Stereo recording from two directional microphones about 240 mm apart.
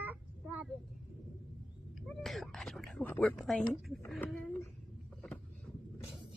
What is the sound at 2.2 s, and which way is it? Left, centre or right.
Whispering, centre.